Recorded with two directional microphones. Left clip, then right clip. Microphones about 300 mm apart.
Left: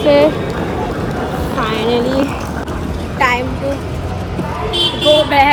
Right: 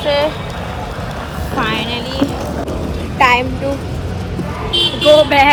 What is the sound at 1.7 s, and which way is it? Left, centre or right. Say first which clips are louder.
Speech: left 4 dB; left.